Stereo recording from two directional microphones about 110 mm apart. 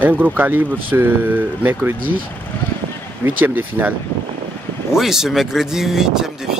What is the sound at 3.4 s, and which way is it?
Speech, 15° right (ahead or behind).